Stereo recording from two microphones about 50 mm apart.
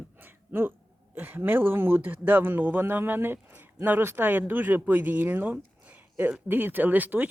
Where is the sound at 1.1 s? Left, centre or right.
Right.